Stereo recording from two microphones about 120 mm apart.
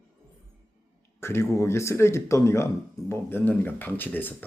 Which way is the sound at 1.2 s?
20° left (ahead or behind).